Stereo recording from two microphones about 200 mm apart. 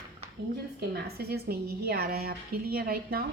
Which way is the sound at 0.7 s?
55° right (ahead or behind).